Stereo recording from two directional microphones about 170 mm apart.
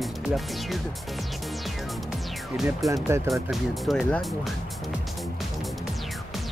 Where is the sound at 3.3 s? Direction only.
Centre (ahead or behind).